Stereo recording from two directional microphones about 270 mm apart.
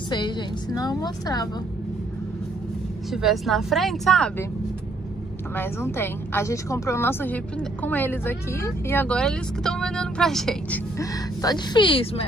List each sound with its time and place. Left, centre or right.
0.1 s a woman's voice: centre
3.1 s a woman's voice: centre
5.6 s a woman's voice: centre